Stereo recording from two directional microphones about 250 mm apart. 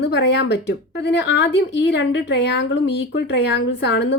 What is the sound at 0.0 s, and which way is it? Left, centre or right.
Speech, left.